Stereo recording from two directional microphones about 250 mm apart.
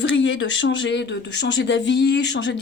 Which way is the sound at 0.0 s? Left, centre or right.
Left.